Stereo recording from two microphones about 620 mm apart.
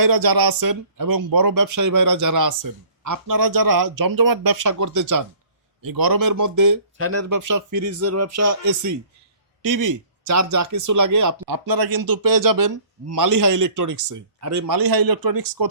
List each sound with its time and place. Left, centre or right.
0.0 s speech: right